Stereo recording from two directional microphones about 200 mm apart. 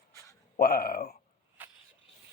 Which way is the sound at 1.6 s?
10° right (ahead or behind).